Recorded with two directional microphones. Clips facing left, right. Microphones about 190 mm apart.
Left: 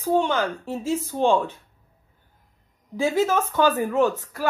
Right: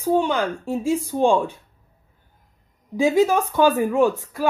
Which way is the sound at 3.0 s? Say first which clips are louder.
Right 4 dB; 15° right (ahead or behind).